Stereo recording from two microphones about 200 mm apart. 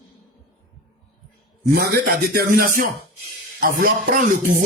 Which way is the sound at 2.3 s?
50° right (ahead or behind).